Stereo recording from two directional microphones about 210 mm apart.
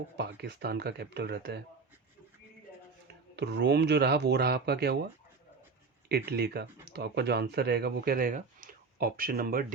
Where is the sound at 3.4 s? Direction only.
55° right (ahead or behind).